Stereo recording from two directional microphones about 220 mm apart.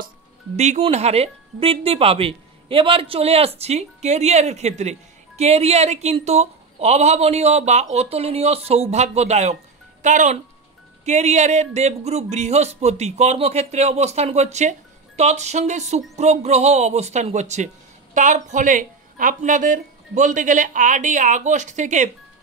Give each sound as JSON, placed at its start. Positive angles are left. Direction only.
{"t": 0.6, "sound": "speech", "side_deg": -30}